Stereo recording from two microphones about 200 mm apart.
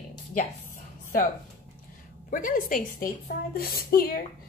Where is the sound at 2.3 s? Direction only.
40° left (ahead or behind).